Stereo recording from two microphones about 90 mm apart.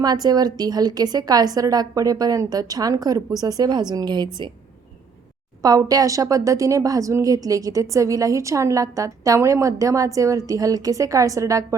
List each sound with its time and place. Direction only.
0.0 s a woman's voice: 50° right (ahead or behind)
5.6 s a woman's voice: 40° right (ahead or behind)